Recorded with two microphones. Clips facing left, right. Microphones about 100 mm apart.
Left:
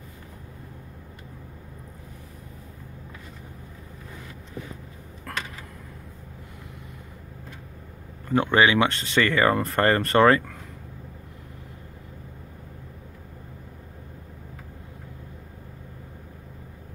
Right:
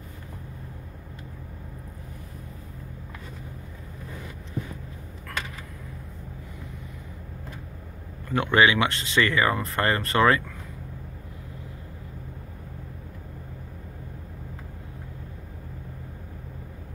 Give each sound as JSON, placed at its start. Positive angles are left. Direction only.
{"t": 8.3, "sound": "speech", "side_deg": 30}